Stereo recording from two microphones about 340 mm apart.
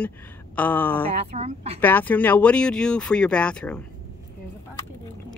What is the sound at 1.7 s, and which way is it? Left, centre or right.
Speech, centre.